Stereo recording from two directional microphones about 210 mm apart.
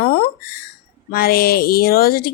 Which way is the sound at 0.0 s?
45° left (ahead or behind).